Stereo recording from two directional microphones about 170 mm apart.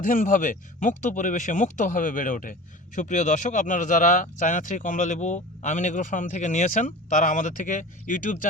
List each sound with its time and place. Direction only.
0.0 s speech: 50° left (ahead or behind)